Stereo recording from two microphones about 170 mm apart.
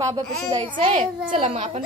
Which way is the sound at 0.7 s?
40° right (ahead or behind).